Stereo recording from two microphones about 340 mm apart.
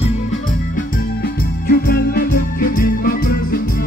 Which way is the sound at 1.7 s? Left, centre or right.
Left.